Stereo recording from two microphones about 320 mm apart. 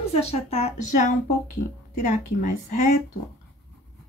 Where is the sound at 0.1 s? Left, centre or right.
Centre.